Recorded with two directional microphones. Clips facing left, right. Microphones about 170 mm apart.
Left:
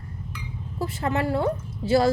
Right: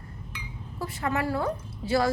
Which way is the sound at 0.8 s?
25° left (ahead or behind).